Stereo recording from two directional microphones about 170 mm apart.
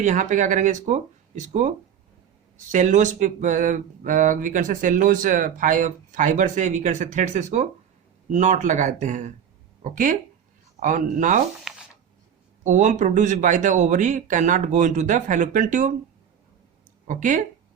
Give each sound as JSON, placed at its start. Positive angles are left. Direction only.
{"t": 0.0, "sound": "speech", "side_deg": -45}
{"t": 2.7, "sound": "speech", "side_deg": -45}
{"t": 11.7, "sound": "a sound", "side_deg": 0}
{"t": 12.6, "sound": "speech", "side_deg": -45}
{"t": 17.1, "sound": "speech", "side_deg": -50}